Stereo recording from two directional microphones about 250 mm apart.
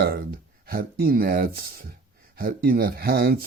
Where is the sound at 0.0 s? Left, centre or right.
Right.